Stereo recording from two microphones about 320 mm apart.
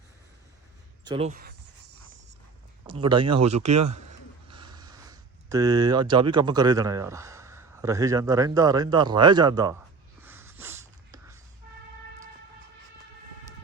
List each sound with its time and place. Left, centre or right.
1.0 s speech: centre
2.8 s speech: centre
10.2 s snort: centre